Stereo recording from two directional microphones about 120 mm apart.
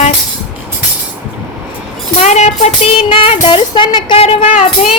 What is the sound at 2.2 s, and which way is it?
Music, 70° left (ahead or behind).